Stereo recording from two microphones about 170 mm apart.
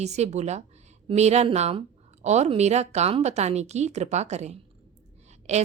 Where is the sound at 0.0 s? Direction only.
40° right (ahead or behind).